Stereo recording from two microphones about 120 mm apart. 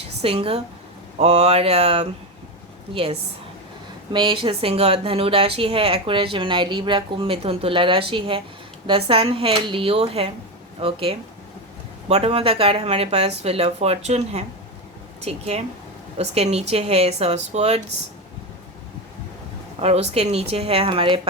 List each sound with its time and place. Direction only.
0.2 s speech: 50° right (ahead or behind)
19.8 s speech: 60° right (ahead or behind)